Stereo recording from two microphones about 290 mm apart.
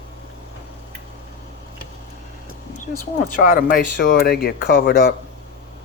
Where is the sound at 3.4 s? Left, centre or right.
Left.